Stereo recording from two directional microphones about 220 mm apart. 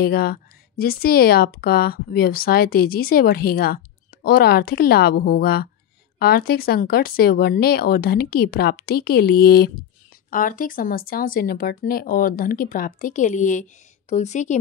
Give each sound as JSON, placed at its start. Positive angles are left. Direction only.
{"t": 0.0, "sound": "speech", "side_deg": 45}